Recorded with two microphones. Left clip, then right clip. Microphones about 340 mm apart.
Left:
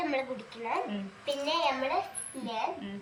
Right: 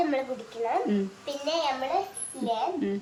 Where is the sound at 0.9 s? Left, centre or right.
Centre.